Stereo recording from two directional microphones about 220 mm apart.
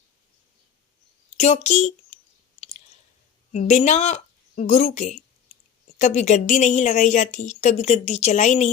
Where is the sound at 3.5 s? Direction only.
35° left (ahead or behind).